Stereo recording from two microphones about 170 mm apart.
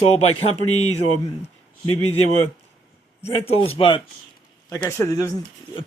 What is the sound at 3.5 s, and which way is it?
Speech, 35° left (ahead or behind).